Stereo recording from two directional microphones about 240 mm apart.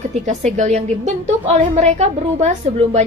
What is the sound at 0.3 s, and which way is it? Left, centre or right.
A woman's voice, right.